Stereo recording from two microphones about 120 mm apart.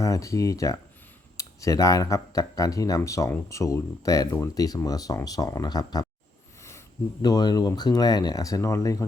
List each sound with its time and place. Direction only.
0.0 s speech: 25° left (ahead or behind)
7.2 s speech: 35° left (ahead or behind)